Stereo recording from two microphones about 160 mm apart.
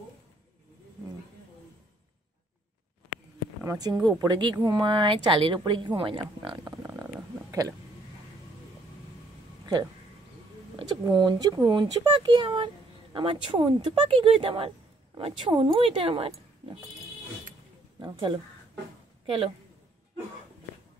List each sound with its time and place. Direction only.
3.6 s speech: 20° right (ahead or behind)
6.6 s stomach rumble: 15° right (ahead or behind)
10.8 s speech: 30° right (ahead or behind)
17.9 s speech: 30° right (ahead or behind)